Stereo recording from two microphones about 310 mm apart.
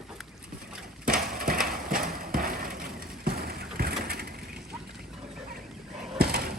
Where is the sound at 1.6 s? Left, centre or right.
Right.